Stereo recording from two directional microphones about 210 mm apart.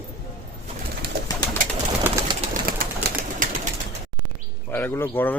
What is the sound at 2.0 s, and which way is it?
Pigeon, 10° right (ahead or behind).